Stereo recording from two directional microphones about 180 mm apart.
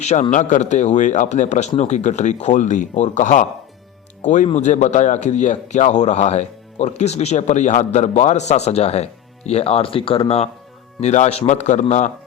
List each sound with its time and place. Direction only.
0.0 s a man's voice: 40° left (ahead or behind)